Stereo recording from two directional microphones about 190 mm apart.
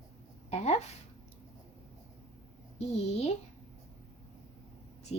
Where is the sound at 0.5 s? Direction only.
35° left (ahead or behind).